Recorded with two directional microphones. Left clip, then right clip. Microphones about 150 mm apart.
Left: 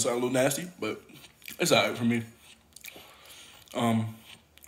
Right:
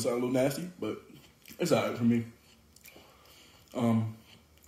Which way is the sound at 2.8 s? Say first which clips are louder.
Left 8 dB; 15° right (ahead or behind).